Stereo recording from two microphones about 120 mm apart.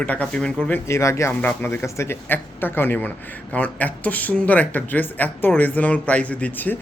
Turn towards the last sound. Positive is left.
turn(degrees=15)  # may be behind; listen again after turning